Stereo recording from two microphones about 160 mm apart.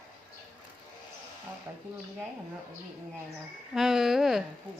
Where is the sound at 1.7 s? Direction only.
15° right (ahead or behind).